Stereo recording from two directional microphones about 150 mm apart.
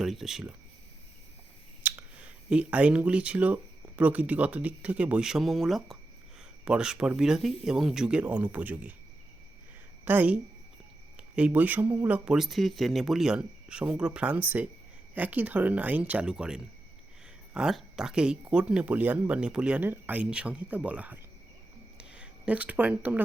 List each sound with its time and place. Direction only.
0.0 s speech: centre (ahead or behind)
1.8 s speech: 10° right (ahead or behind)
10.1 s speech: 10° right (ahead or behind)
21.9 s a sound: 5° right (ahead or behind)